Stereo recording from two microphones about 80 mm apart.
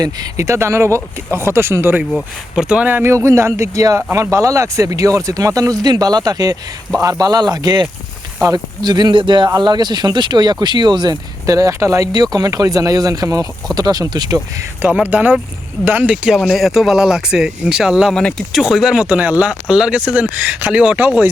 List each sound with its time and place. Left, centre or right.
0.0 s speech: right
2.1 s speech: centre
2.8 s speech: right
3.1 s speech: right
9.6 s speech: right
11.4 s speech: right
12.1 s speech: right
14.8 s speech: centre
16.4 s speech: centre
18.1 s speech: centre
18.5 s speech: centre